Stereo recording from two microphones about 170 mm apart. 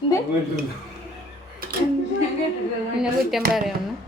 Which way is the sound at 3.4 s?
65° right (ahead or behind).